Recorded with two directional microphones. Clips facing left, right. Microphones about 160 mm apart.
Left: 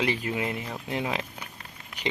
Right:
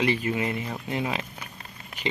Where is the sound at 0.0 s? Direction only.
10° left (ahead or behind).